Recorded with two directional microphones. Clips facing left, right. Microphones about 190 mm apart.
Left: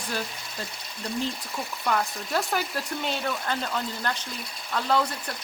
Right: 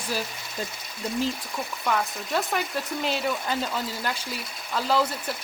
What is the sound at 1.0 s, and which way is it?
Speech, centre (ahead or behind).